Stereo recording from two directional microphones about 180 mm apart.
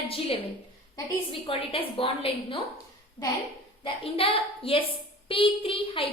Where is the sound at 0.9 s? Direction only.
30° left (ahead or behind).